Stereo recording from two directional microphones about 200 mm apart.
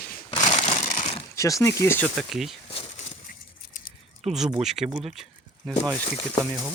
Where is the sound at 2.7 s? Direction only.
25° left (ahead or behind).